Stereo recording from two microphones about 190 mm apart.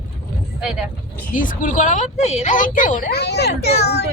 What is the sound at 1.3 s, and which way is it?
A woman's voice, 45° left (ahead or behind).